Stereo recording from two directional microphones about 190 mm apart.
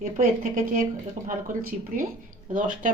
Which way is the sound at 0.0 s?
45° right (ahead or behind).